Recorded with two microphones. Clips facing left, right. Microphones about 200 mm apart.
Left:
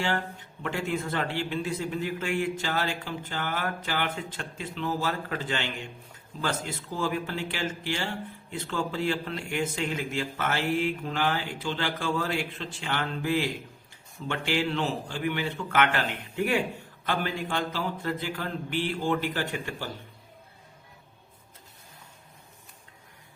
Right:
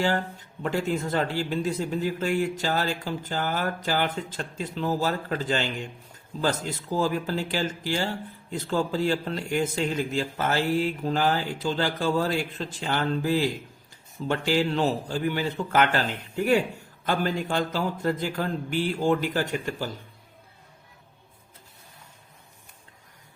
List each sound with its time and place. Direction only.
0.6 s speech: 35° right (ahead or behind)